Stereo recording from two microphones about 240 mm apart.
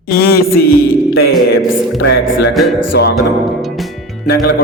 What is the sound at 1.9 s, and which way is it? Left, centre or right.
Music, left.